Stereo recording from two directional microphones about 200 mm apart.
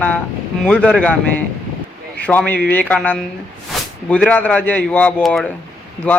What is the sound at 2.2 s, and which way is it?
A man's voice, 5° left (ahead or behind).